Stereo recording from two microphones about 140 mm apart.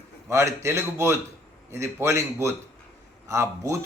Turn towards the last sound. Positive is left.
turn(degrees=-20)  # may be behind; listen again after turning